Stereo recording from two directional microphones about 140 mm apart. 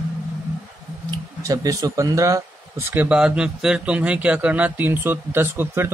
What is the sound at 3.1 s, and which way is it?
A man's voice, 5° right (ahead or behind).